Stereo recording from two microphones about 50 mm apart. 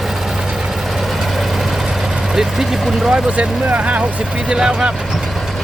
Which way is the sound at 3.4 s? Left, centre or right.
Right.